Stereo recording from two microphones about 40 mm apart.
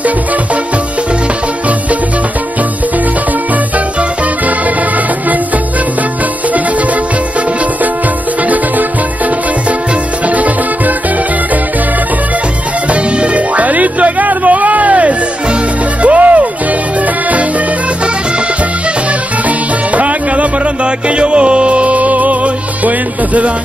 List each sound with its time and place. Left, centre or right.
12.9 s music: right
20.0 s music: right